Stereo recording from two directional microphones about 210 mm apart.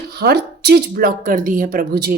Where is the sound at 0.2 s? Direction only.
50° right (ahead or behind).